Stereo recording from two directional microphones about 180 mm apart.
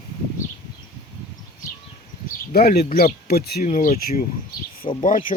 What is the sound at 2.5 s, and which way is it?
Speech, 60° left (ahead or behind).